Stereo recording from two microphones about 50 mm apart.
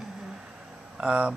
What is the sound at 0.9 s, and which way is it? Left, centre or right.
Speech, right.